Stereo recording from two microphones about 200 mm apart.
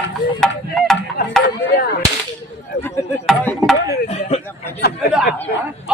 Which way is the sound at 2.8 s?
5° left (ahead or behind).